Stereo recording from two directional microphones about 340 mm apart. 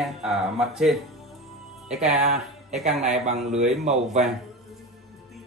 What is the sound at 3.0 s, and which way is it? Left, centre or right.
Speech, centre.